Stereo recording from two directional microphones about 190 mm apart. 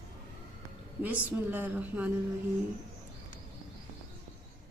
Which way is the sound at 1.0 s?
10° right (ahead or behind).